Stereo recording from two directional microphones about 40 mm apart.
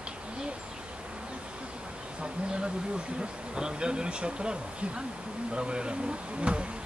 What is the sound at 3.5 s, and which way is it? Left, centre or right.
Speech, right.